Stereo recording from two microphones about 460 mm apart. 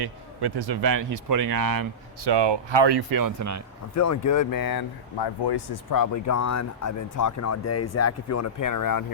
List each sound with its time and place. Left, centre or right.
0.0 s a man's voice: right
3.9 s speech: left